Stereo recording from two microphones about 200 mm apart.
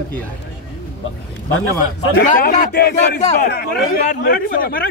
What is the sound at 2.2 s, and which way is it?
A man's voice, 45° left (ahead or behind).